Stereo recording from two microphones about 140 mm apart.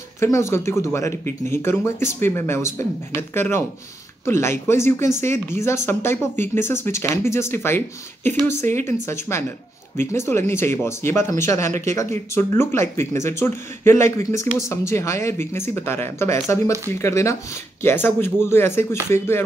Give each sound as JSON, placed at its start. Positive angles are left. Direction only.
{"t": 0.2, "sound": "speech", "side_deg": 20}